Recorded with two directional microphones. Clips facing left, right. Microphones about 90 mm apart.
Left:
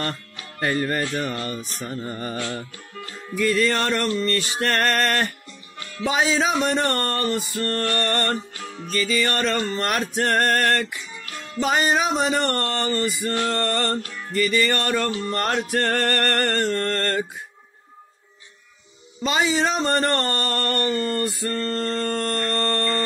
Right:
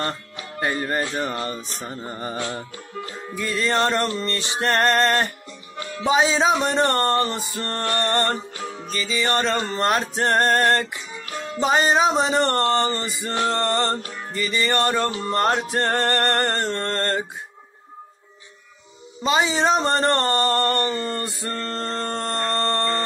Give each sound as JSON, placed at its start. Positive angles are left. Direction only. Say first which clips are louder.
{"t": 0.0, "sound": "speech", "louder": "right 2 dB", "side_deg": -25}
{"t": 19.2, "sound": "speech", "louder": "right 2 dB", "side_deg": -25}